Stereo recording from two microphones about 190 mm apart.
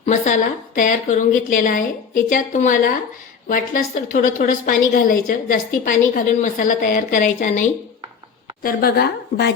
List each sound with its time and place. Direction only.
0.0 s a woman's voice: 40° left (ahead or behind)
8.6 s a woman's voice: 55° left (ahead or behind)